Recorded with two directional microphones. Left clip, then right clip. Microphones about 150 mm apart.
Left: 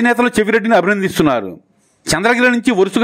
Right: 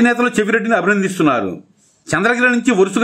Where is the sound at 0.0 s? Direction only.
45° left (ahead or behind).